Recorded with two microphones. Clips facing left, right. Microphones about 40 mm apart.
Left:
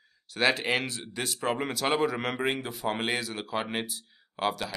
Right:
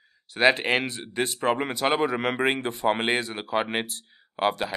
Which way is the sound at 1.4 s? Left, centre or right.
Centre.